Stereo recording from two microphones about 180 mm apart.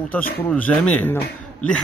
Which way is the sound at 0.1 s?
10° left (ahead or behind).